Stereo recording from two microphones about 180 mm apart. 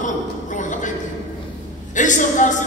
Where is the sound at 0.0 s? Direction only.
45° left (ahead or behind).